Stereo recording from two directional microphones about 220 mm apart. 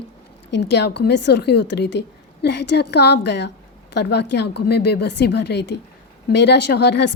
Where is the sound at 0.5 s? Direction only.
50° left (ahead or behind).